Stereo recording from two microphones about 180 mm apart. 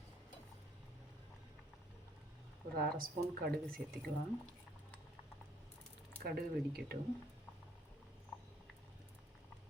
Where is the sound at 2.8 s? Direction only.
55° right (ahead or behind).